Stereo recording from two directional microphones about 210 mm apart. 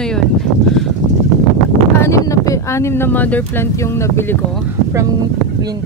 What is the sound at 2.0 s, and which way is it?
Speech, 15° left (ahead or behind).